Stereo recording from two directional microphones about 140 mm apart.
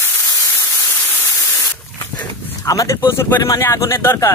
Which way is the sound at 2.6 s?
25° left (ahead or behind).